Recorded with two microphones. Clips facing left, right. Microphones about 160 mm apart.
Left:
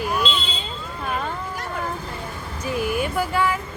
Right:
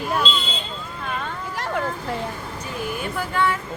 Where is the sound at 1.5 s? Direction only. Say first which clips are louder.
Right 4 dB; 90° right.